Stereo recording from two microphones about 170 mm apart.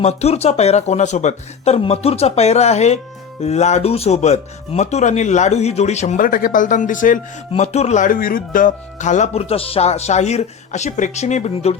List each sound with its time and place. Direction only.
0.0 s speech: 40° left (ahead or behind)